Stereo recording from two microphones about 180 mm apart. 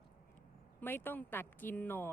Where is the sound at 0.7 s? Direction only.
10° left (ahead or behind).